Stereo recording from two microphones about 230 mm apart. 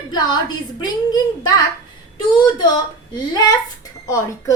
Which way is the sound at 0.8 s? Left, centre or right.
Centre.